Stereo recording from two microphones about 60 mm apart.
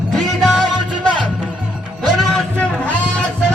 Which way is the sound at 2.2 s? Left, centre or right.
Centre.